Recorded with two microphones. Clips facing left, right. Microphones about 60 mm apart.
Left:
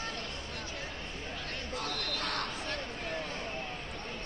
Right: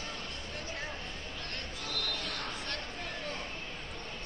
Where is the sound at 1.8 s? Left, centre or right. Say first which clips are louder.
Left 1 dB; left.